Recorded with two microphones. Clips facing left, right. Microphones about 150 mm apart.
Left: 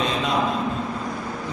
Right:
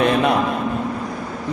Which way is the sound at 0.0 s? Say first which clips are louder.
Right 8 dB; 60° right (ahead or behind).